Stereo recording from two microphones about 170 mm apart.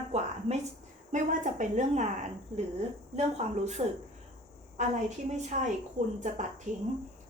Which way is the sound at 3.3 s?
40° right (ahead or behind).